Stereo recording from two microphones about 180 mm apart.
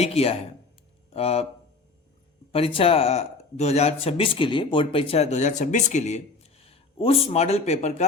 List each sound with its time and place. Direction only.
0.0 s speech: 35° left (ahead or behind)
2.5 s speech: 30° left (ahead or behind)